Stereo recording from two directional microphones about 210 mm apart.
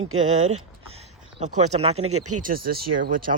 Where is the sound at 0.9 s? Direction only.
30° right (ahead or behind).